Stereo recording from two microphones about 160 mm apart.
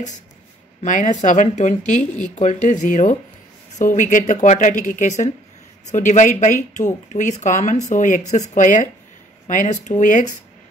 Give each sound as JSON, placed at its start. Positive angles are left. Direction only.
{"t": 0.8, "sound": "speech", "side_deg": 50}